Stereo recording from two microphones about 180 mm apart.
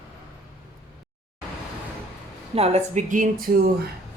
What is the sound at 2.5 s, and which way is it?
Speech, 35° right (ahead or behind).